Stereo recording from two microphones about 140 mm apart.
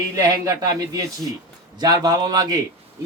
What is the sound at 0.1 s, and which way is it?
Speech, 25° right (ahead or behind).